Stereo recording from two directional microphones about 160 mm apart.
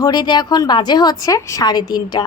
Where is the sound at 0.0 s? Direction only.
25° left (ahead or behind).